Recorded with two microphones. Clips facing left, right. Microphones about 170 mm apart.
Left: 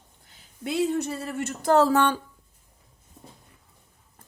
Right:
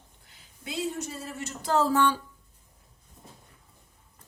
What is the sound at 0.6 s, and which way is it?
Speech, 65° left (ahead or behind).